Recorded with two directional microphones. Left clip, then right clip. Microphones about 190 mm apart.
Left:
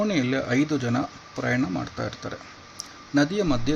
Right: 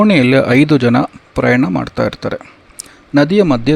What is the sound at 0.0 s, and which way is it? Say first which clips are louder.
Speech: right 14 dB; 55° right (ahead or behind).